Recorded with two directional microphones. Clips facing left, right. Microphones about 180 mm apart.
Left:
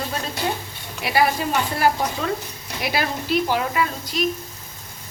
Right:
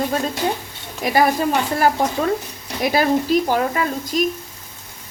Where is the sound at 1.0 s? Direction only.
45° right (ahead or behind).